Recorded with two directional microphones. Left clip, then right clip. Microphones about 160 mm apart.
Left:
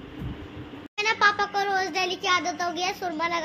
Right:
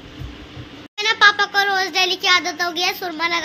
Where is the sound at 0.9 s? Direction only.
5° right (ahead or behind).